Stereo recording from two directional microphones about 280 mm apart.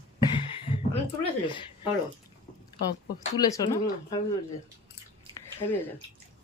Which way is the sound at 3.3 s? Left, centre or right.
Centre.